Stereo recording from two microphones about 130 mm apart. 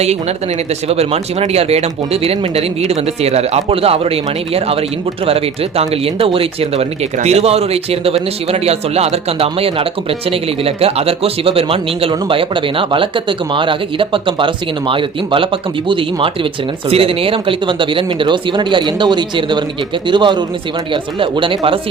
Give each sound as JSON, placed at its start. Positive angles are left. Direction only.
{"t": 0.0, "sound": "speech", "side_deg": -55}